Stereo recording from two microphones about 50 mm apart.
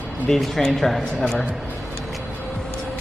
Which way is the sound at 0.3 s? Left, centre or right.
Centre.